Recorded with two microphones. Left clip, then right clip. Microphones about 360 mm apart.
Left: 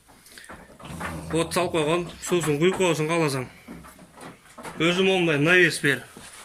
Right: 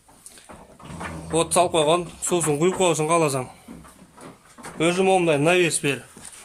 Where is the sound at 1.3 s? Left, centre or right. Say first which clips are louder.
Right 5 dB; centre.